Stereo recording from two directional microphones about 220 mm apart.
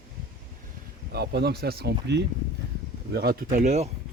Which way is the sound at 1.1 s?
45° right (ahead or behind).